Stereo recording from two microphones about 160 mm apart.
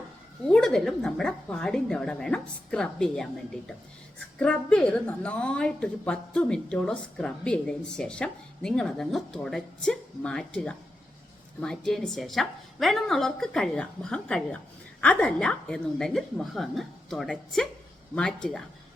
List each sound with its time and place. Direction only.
0.4 s a woman's voice: 5° left (ahead or behind)
4.4 s a woman's voice: 5° left (ahead or behind)